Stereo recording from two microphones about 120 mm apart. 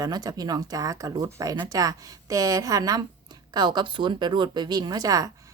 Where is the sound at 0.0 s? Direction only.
30° right (ahead or behind).